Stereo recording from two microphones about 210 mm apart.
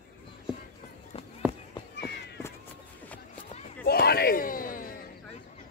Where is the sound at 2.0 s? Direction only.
50° left (ahead or behind).